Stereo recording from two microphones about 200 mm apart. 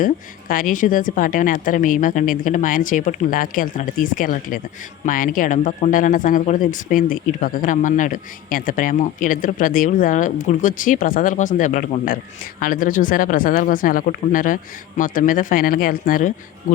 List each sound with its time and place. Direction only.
0.0 s speech: 45° left (ahead or behind)